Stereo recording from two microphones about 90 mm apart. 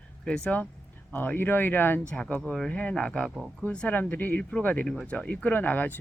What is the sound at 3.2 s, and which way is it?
Speech, 5° right (ahead or behind).